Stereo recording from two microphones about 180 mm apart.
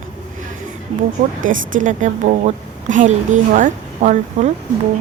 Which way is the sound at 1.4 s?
90° right.